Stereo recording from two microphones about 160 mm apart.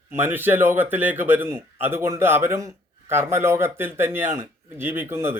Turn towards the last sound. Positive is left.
turn(degrees=-15)  # may be behind; listen again after turning